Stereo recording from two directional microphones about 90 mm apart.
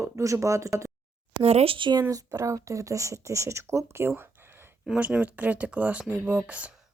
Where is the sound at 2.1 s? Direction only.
40° right (ahead or behind).